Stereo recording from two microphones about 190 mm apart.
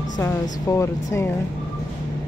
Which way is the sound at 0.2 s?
15° left (ahead or behind).